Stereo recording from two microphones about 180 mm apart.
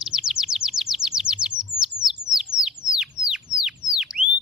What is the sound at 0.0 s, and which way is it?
Chirp, 5° right (ahead or behind).